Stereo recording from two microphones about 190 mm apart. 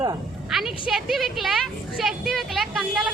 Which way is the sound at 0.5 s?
Centre (ahead or behind).